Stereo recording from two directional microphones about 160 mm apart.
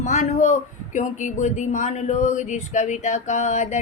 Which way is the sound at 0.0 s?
50° left (ahead or behind).